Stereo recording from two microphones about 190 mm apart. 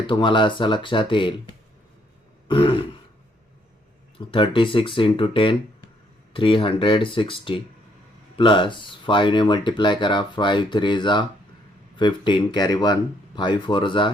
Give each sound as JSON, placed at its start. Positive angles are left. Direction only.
{"t": 0.1, "sound": "speech", "side_deg": 25}
{"t": 4.2, "sound": "speech", "side_deg": 25}